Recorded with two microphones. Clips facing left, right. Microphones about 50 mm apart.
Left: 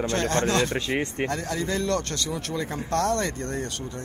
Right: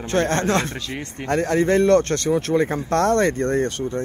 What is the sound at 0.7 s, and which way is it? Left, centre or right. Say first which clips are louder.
Speech: left 4 dB; left.